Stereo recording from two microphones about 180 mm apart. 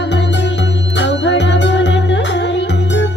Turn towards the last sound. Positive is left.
turn(degrees=80)